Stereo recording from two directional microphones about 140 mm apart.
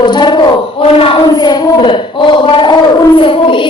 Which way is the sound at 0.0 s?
35° left (ahead or behind).